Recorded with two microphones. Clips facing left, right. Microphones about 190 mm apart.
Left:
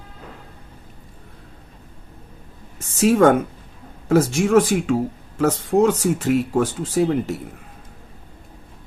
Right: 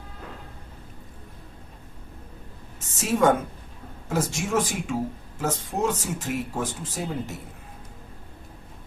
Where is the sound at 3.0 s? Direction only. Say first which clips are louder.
Left 7 dB; 75° left (ahead or behind).